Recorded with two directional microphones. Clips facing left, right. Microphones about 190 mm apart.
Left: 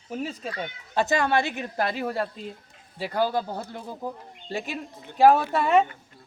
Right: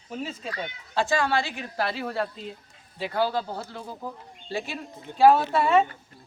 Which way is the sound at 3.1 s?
15° left (ahead or behind).